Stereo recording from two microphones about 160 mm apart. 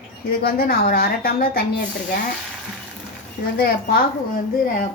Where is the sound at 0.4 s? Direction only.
65° left (ahead or behind).